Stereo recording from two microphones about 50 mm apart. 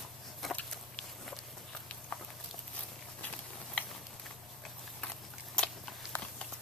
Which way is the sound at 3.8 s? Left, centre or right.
Left.